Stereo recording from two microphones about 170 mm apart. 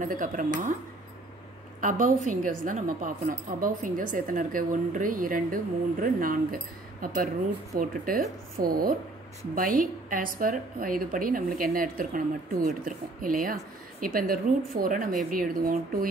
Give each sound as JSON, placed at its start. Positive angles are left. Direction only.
{"t": 0.0, "sound": "a woman's voice", "side_deg": -50}
{"t": 1.8, "sound": "a woman's voice", "side_deg": -50}